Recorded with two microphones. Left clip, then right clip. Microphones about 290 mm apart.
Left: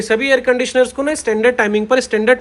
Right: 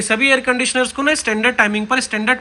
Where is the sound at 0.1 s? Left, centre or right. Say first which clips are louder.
Left 1 dB; centre.